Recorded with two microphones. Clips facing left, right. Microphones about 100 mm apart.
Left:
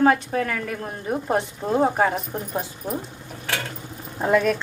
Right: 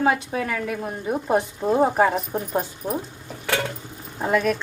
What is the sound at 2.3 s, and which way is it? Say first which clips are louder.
Speech: right 3 dB; 15° right (ahead or behind).